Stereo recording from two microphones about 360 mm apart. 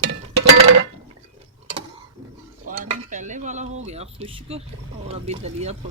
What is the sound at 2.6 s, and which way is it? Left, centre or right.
Cutlery, right.